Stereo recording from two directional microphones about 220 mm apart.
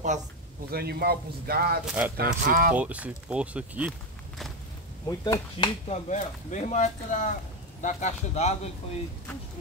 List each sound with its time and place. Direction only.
0.7 s speech: 45° right (ahead or behind)
1.9 s speech: 5° right (ahead or behind)
2.1 s speech: 40° right (ahead or behind)
2.7 s speech: 5° right (ahead or behind)
5.0 s speech: 15° left (ahead or behind)